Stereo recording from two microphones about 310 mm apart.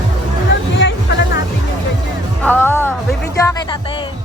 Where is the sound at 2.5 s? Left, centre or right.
Centre.